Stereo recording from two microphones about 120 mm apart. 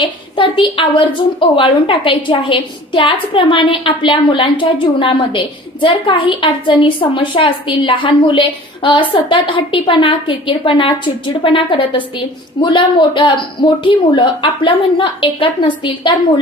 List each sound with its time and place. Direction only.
0.0 s a woman's voice: 45° left (ahead or behind)